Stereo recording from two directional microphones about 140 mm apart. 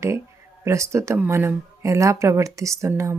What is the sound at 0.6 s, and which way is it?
Speech, 20° right (ahead or behind).